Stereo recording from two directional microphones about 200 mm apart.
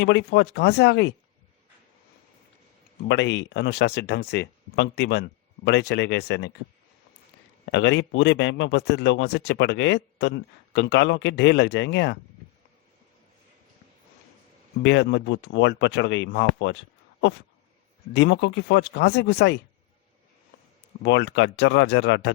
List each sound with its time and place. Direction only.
0.0 s a man's voice: 65° left (ahead or behind)
3.1 s a man's voice: 60° left (ahead or behind)
7.7 s a man's voice: 60° left (ahead or behind)
14.8 s a man's voice: 65° left (ahead or behind)
18.1 s a man's voice: 60° left (ahead or behind)
21.0 s a man's voice: 60° left (ahead or behind)